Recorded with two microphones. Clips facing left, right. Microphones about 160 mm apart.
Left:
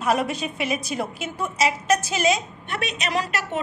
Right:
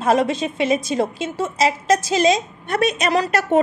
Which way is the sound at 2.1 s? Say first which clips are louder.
Right 5 dB; 40° right (ahead or behind).